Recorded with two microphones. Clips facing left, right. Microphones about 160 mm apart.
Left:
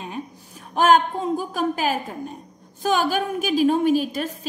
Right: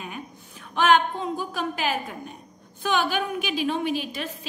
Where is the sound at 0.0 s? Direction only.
35° left (ahead or behind).